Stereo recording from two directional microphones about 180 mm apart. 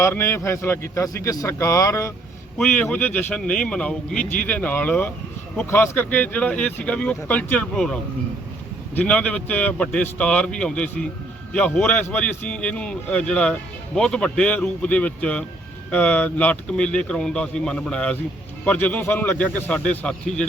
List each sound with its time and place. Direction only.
0.0 s a man's voice: 15° left (ahead or behind)
9.0 s a man's voice: 5° left (ahead or behind)